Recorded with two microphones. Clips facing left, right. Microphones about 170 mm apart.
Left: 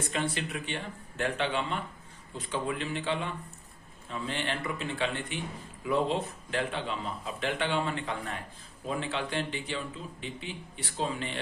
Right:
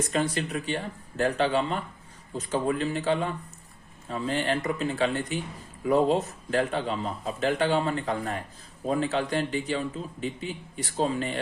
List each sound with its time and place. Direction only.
0.1 s speech: 40° right (ahead or behind)